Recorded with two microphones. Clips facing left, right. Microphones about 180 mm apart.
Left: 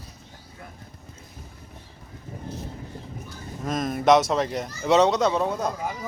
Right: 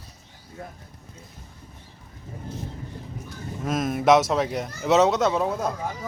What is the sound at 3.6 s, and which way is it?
Speech, 5° right (ahead or behind).